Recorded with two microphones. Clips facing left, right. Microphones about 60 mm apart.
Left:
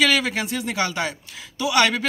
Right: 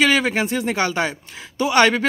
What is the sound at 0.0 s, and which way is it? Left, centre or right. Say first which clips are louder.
Speech: right 3 dB; right.